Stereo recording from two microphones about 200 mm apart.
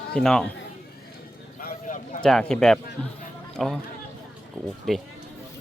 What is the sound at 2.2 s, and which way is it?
Speech, 5° left (ahead or behind).